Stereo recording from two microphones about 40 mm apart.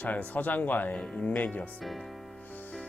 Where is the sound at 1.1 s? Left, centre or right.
Left.